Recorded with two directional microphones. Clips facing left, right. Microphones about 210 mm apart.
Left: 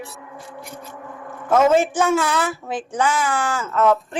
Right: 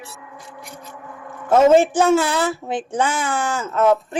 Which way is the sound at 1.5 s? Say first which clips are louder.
Right 3 dB; 30° right (ahead or behind).